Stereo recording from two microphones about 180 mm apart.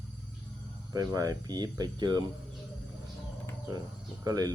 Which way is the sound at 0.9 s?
20° right (ahead or behind).